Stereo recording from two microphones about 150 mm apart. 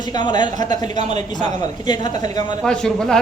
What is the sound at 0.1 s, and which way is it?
Speech, 30° left (ahead or behind).